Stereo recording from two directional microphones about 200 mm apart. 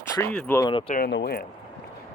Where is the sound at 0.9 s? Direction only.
55° left (ahead or behind).